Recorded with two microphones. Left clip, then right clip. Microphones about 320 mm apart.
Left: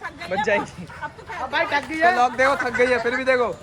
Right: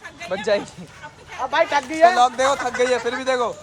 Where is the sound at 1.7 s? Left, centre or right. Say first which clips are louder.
Right 3 dB; right.